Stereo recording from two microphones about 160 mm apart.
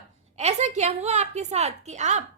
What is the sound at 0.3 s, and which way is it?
A woman's voice, 45° right (ahead or behind).